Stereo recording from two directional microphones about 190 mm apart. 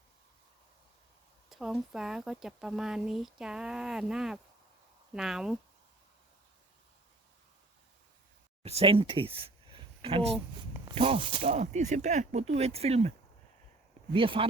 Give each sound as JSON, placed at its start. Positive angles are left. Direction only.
{"t": 1.5, "sound": "speech", "side_deg": 0}
{"t": 8.6, "sound": "speech", "side_deg": -30}
{"t": 9.7, "sound": "a sound", "side_deg": -30}
{"t": 10.9, "sound": "speech", "side_deg": -30}